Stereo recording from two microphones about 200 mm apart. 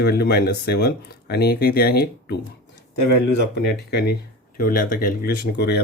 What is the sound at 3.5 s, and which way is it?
Speech, 55° left (ahead or behind).